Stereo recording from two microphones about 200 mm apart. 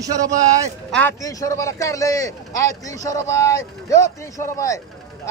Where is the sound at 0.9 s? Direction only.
15° left (ahead or behind).